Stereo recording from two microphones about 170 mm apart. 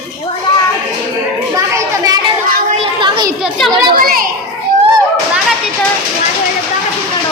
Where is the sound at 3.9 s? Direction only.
60° right (ahead or behind).